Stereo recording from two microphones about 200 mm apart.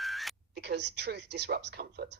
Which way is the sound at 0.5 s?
55° right (ahead or behind).